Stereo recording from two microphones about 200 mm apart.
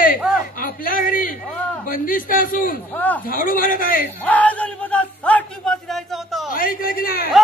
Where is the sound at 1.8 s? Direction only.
45° left (ahead or behind).